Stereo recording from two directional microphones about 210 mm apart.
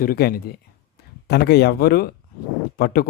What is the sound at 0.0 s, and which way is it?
Speech, 45° left (ahead or behind).